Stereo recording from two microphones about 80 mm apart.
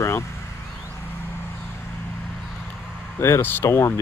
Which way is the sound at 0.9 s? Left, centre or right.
Left.